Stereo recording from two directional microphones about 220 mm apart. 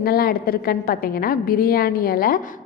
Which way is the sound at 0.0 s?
40° left (ahead or behind).